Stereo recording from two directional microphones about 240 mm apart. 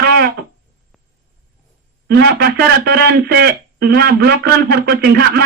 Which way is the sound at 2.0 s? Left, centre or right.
Right.